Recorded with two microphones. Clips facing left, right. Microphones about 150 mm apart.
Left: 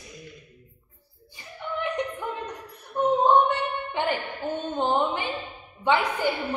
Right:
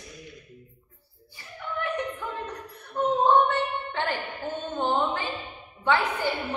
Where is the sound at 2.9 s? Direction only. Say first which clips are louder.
Left 1 dB; 15° left (ahead or behind).